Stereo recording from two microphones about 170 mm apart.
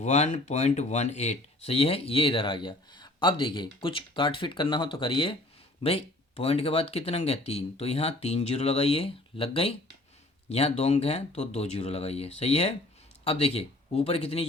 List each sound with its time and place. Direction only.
0.0 s speech: 45° left (ahead or behind)